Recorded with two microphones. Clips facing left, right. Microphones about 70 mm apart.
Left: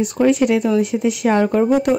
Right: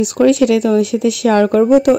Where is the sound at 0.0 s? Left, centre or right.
Right.